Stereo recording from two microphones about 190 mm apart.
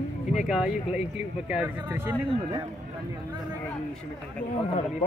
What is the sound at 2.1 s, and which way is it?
Speech, 25° right (ahead or behind).